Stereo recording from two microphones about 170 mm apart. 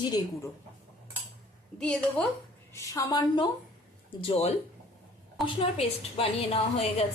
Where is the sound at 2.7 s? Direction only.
20° left (ahead or behind); by 7.1 s 35° left (ahead or behind).